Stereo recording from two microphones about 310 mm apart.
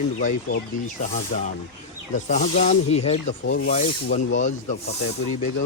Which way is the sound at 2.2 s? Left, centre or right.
Left.